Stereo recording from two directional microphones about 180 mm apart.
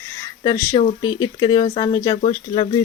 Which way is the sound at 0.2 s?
20° left (ahead or behind).